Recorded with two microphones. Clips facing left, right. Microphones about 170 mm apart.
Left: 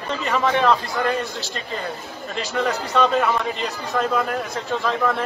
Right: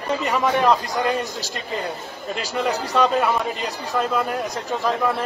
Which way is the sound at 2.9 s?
10° right (ahead or behind).